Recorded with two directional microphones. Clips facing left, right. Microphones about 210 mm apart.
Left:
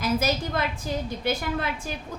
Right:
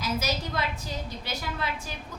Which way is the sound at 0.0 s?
55° left (ahead or behind).